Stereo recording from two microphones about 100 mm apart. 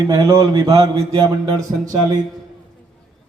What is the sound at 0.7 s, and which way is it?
Speech, 70° right (ahead or behind).